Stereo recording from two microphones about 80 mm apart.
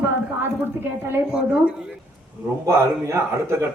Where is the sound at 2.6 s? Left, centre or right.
Right.